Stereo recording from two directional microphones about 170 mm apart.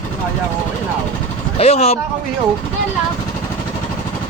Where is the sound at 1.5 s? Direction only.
35° left (ahead or behind).